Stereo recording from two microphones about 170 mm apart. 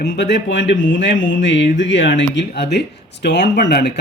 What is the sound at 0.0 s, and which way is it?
Speech, 90° left.